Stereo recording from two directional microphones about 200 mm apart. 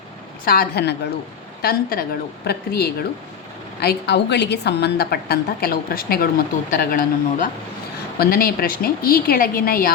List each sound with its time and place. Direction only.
0.4 s a woman's voice: 45° left (ahead or behind)